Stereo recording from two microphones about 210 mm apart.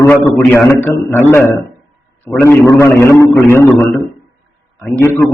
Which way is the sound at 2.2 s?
10° left (ahead or behind).